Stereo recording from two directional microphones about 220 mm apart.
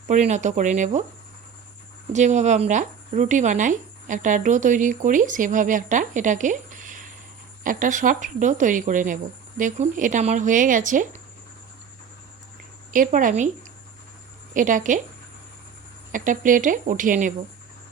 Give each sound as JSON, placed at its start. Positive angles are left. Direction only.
{"t": 0.1, "sound": "speech", "side_deg": -35}
{"t": 2.1, "sound": "speech", "side_deg": -30}
{"t": 12.9, "sound": "speech", "side_deg": -35}
{"t": 14.5, "sound": "speech", "side_deg": -35}
{"t": 16.1, "sound": "speech", "side_deg": -35}